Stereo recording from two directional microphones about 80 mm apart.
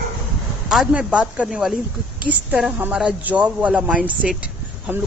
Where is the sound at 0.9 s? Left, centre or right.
Centre.